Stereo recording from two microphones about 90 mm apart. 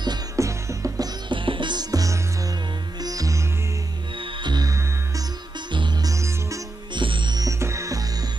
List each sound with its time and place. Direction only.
0.4 s music: 35° right (ahead or behind)
1.3 s music: 70° right (ahead or behind); by 3.4 s 40° right (ahead or behind)
4.2 s music: 60° right (ahead or behind)
4.6 s music: 40° right (ahead or behind)
6.9 s music: 65° right (ahead or behind)
7.3 s music: 35° right (ahead or behind)